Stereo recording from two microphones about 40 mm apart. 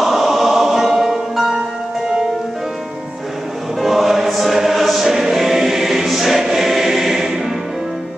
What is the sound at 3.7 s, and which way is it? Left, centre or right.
Choir, centre.